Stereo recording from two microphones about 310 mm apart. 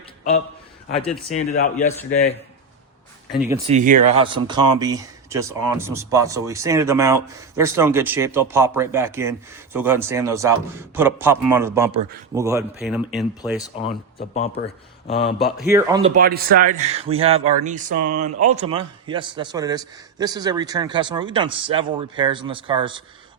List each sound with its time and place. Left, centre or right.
0.9 s a man's voice: centre
3.7 s speech: right; by 13.6 s centre
14.2 s a man's voice: centre
15.4 s speech: centre
15.7 s speech: centre
16.1 s speech: right